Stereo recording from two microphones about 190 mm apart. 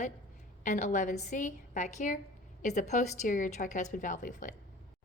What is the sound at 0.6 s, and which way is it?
A woman's voice, 40° left (ahead or behind).